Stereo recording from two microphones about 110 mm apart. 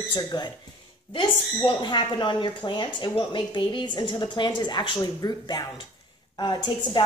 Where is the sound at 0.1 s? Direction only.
45° left (ahead or behind).